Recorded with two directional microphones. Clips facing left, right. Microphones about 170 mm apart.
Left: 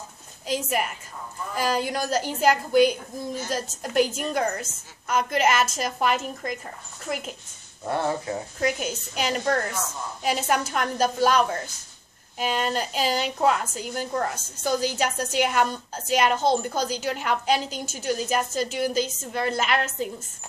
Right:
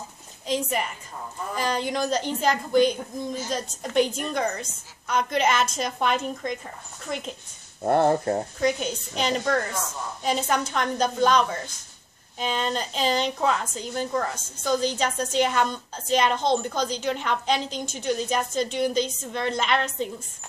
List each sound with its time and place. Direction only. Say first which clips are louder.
0.5 s a woman's voice: even; 5° left (ahead or behind)
7.8 s speech: right 6 dB; 50° right (ahead or behind)
8.5 s a woman's voice: right 2 dB; 5° left (ahead or behind)